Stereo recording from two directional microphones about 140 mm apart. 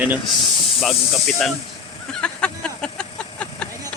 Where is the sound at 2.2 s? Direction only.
5° left (ahead or behind).